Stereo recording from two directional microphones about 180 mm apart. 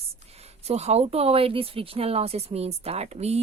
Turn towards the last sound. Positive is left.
turn(degrees=-35)  # may be behind; listen again after turning